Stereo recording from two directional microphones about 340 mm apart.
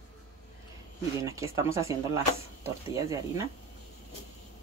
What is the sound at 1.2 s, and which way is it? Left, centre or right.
Speech, centre.